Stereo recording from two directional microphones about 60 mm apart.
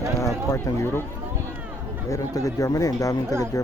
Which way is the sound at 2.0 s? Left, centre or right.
Left.